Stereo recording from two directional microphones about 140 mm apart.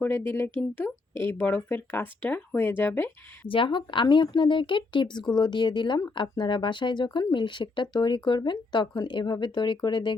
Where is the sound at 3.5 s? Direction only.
35° left (ahead or behind).